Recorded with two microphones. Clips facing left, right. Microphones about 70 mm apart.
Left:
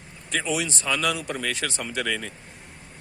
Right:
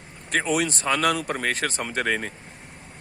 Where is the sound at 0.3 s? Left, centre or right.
Right.